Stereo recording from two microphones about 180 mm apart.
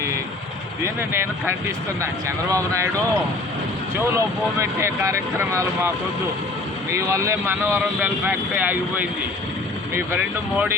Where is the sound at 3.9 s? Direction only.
15° right (ahead or behind).